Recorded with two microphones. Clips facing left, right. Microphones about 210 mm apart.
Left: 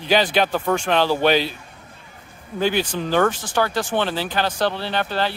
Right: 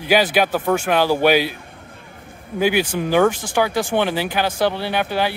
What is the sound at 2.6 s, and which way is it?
Speech, 10° right (ahead or behind).